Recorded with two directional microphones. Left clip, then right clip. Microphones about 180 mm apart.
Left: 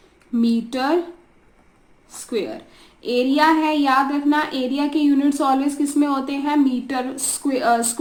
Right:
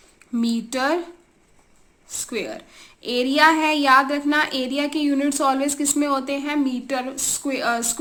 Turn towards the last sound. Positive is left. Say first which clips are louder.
# left 4 dB
turn(degrees=-20)  # may be behind; listen again after turning